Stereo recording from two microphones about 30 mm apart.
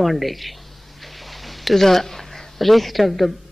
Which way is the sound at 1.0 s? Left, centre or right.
Centre.